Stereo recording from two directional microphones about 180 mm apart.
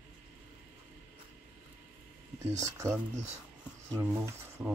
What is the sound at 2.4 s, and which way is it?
Speech, 15° right (ahead or behind).